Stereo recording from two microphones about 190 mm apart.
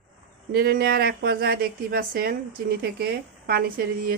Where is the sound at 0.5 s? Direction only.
55° right (ahead or behind).